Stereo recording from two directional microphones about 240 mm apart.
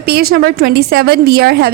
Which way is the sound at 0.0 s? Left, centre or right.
Right.